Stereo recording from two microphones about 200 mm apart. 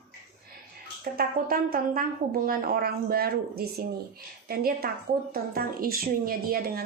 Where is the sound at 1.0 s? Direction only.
50° right (ahead or behind).